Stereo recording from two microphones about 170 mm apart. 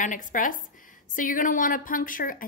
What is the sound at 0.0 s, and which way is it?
A woman's voice, 50° left (ahead or behind).